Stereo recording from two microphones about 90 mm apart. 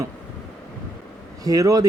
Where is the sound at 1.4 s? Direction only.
40° right (ahead or behind).